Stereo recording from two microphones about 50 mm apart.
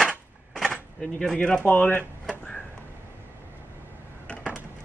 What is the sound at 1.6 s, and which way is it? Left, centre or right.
Speech, left.